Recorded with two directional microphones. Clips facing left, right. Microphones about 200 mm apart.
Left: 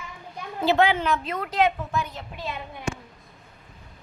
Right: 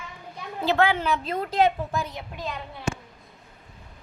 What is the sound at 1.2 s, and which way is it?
Speech, 30° right (ahead or behind).